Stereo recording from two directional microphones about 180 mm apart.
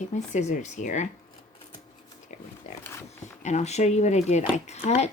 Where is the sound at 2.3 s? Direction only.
40° left (ahead or behind).